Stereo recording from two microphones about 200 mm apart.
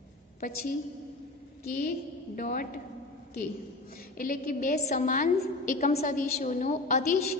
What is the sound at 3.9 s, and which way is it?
A woman's voice, 45° left (ahead or behind).